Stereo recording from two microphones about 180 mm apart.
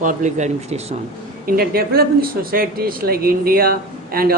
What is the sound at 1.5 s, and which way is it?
Speech, 55° right (ahead or behind).